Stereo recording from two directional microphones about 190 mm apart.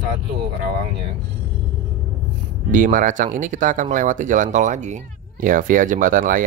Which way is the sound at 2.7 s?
45° right (ahead or behind).